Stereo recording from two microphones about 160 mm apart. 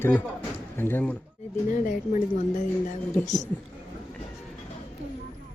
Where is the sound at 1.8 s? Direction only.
55° left (ahead or behind).